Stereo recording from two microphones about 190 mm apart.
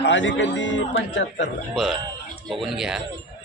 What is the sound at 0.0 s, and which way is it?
Speech, 70° left (ahead or behind).